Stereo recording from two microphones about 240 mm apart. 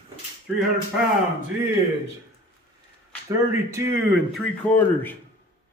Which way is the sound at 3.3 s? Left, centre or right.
Centre.